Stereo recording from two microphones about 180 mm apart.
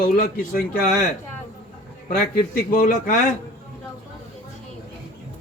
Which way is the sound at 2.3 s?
50° left (ahead or behind).